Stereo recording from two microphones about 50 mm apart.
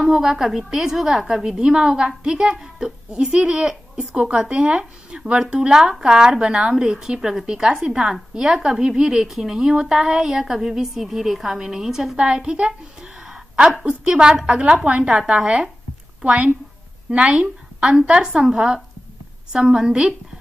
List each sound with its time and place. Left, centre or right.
0.0 s a woman's voice: centre
13.3 s a sound: centre
13.8 s a woman's voice: centre
17.1 s a woman's voice: right